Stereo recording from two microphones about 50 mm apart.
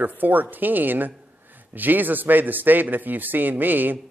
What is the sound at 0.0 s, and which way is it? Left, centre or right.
Speech, right.